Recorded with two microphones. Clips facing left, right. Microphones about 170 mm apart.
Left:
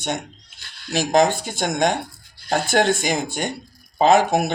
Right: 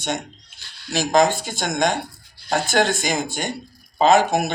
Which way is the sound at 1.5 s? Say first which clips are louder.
Left 1 dB; 60° left (ahead or behind).